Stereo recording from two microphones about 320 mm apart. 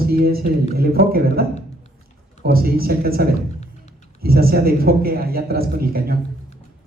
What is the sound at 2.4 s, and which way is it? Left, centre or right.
Speech, right.